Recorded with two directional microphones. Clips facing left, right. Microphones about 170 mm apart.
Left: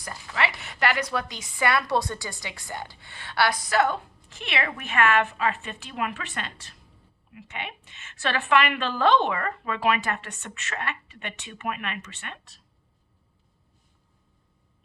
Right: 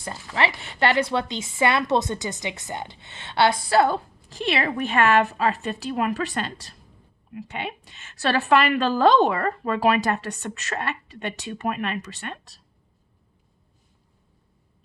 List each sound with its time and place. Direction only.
0.0 s a woman's voice: 30° right (ahead or behind)